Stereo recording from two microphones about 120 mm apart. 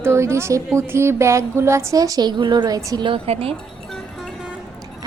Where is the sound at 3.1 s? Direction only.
55° right (ahead or behind).